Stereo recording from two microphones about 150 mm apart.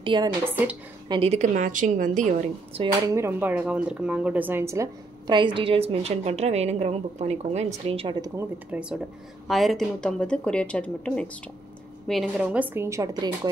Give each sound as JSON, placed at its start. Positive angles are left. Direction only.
{"t": 0.0, "sound": "a woman's voice", "side_deg": -30}
{"t": 1.3, "sound": "a woman's voice", "side_deg": -55}
{"t": 2.7, "sound": "speech", "side_deg": -40}
{"t": 3.2, "sound": "speech", "side_deg": -15}
{"t": 5.2, "sound": "a woman's voice", "side_deg": -30}
{"t": 8.6, "sound": "a woman's voice", "side_deg": -5}
{"t": 12.4, "sound": "speech", "side_deg": -10}